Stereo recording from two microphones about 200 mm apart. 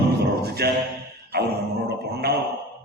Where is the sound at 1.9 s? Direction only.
55° right (ahead or behind).